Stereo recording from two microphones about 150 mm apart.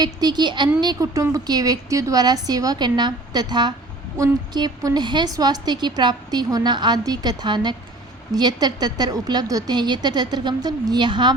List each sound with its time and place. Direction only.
0.0 s a woman's voice: 25° right (ahead or behind)